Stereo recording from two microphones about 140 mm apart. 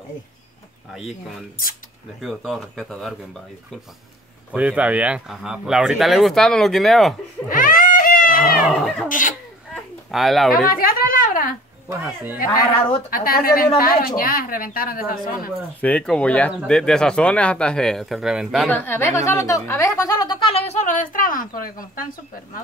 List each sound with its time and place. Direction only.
2.2 s speech: centre (ahead or behind)
4.5 s speech: 10° right (ahead or behind)
7.4 s a sound: 75° left (ahead or behind)
8.7 s speech: 5° left (ahead or behind)
10.1 s speech: centre (ahead or behind)
10.7 s a sound: 90° left
11.9 s speech: 15° right (ahead or behind)
13.1 s a woman's voice: 90° left
15.8 s speech: 5° left (ahead or behind)
18.7 s speech: 15° left (ahead or behind); by 22.0 s 80° left